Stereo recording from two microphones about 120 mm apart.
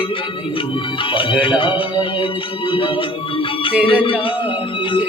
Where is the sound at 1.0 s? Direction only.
45° left (ahead or behind).